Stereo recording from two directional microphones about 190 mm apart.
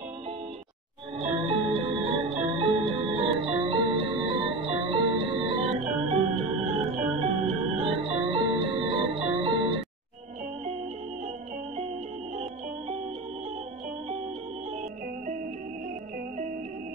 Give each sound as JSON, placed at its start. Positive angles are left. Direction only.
{"t": 1.1, "sound": "music", "side_deg": -30}
{"t": 12.4, "sound": "music", "side_deg": -35}